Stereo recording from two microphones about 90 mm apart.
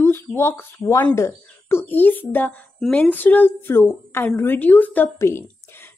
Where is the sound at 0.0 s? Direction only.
30° left (ahead or behind).